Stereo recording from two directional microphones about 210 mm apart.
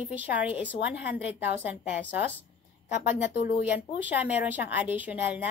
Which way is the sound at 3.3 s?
50° left (ahead or behind).